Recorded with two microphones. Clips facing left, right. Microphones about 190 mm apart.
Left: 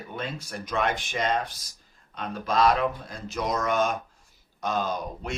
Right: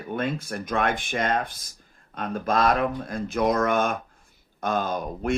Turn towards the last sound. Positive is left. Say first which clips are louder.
# right 4 dB
turn(degrees=-50)  # may be behind; listen again after turning